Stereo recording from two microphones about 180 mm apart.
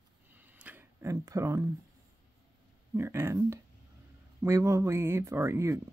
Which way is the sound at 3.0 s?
15° right (ahead or behind).